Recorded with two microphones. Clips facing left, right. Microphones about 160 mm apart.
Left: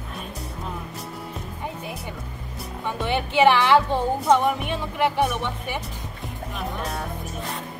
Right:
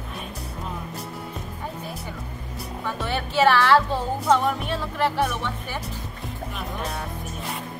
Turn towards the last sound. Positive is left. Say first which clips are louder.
# left 1 dB
turn(degrees=0)  # may be behind; listen again after turning